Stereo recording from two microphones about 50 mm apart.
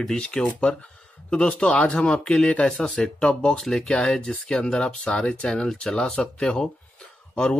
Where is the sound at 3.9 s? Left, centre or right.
Centre.